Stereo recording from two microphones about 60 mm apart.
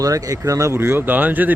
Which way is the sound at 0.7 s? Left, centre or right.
Right.